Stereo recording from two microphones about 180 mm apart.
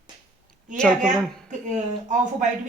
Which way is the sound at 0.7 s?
5° left (ahead or behind).